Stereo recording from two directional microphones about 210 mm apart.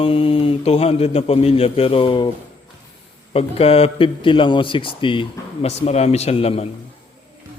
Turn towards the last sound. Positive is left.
turn(degrees=30)  # may be behind; listen again after turning